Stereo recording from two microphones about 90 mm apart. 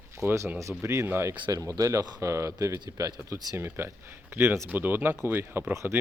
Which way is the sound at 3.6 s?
25° right (ahead or behind).